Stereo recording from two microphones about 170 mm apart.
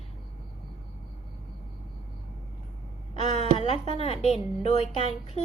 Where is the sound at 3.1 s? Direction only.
35° left (ahead or behind).